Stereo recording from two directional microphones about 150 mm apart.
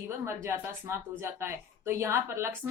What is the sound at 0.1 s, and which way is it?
A woman's voice, 20° right (ahead or behind).